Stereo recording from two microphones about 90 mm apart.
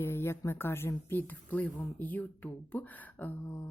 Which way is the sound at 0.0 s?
25° left (ahead or behind).